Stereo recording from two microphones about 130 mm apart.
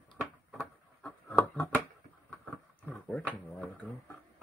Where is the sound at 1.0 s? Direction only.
10° left (ahead or behind).